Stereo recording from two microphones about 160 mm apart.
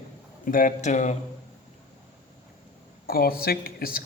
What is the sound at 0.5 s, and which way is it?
Speech, 55° left (ahead or behind).